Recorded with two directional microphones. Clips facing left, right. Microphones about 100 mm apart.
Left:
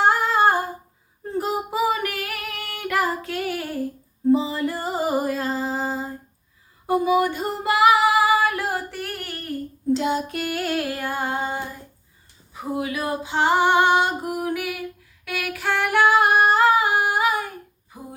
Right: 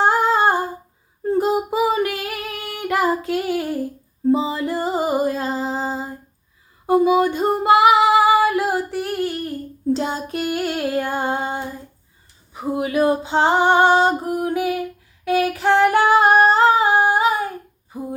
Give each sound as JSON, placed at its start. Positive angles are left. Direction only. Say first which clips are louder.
{"t": 0.0, "sound": "humming", "louder": "right 2 dB", "side_deg": -25}
{"t": 1.4, "sound": "female singing", "louder": "right 4 dB", "side_deg": -25}
{"t": 4.3, "sound": "music", "louder": "right 1 dB", "side_deg": -25}
{"t": 6.8, "sound": "female singing", "louder": "right 4 dB", "side_deg": -25}
{"t": 9.9, "sound": "child singing", "louder": "even", "side_deg": -35}
{"t": 10.4, "sound": "music", "louder": "right 3 dB", "side_deg": -25}
{"t": 12.5, "sound": "female singing", "louder": "right 7 dB", "side_deg": -30}
{"t": 14.3, "sound": "a sound", "louder": "right 5 dB", "side_deg": -30}
{"t": 15.2, "sound": "female singing", "louder": "right 10 dB", "side_deg": -30}